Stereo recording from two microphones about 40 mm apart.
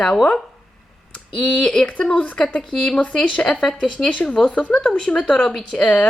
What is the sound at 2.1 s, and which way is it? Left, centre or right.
Speech, left.